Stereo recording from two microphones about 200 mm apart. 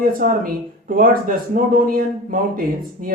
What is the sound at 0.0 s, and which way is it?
Speech, 45° right (ahead or behind).